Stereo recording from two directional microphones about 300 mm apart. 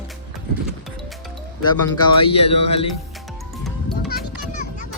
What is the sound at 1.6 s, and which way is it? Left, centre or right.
Speech, centre.